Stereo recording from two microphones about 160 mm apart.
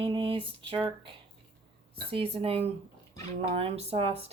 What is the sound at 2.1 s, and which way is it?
Speech, 35° right (ahead or behind).